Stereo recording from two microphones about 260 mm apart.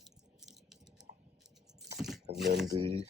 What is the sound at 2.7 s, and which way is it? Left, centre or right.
Speech, right.